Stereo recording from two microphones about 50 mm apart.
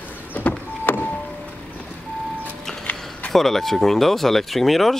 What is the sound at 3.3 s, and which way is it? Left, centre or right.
Speech, centre.